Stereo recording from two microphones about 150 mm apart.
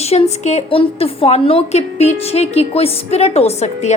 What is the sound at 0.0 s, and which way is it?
A woman's voice, 45° left (ahead or behind).